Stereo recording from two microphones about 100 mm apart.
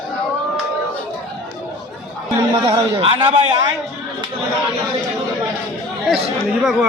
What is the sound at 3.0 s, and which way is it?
Speech, 70° right (ahead or behind).